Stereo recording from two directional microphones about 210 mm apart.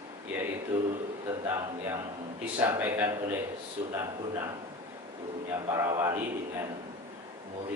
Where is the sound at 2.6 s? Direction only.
10° right (ahead or behind).